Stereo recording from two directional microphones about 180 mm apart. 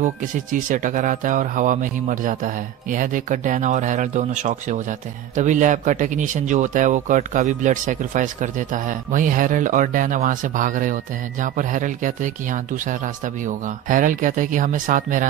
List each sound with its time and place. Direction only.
0.0 s speech: 45° right (ahead or behind)